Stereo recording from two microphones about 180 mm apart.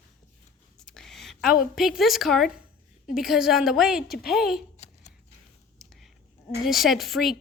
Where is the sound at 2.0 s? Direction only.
Centre (ahead or behind).